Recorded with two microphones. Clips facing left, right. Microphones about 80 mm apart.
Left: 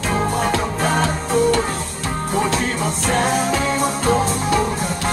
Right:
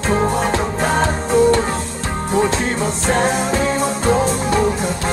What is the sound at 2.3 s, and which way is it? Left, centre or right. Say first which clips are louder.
Music: right 3 dB; right.